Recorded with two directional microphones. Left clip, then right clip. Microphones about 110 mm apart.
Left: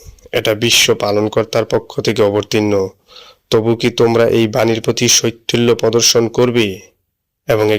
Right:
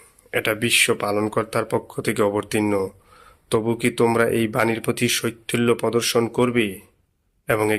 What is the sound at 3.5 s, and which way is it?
Speech, 30° left (ahead or behind).